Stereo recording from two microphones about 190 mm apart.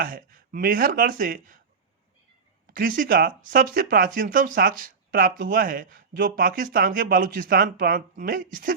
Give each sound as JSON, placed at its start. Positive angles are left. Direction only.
{"t": 0.0, "sound": "speech", "side_deg": -50}
{"t": 2.7, "sound": "speech", "side_deg": -45}